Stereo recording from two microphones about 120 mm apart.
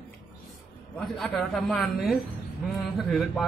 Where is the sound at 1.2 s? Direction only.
5° left (ahead or behind).